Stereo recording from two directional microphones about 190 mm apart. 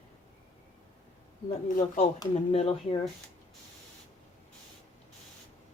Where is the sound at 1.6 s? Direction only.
45° left (ahead or behind).